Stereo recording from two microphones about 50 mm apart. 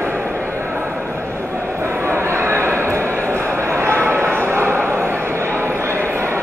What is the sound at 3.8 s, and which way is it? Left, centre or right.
Bow-wow, right.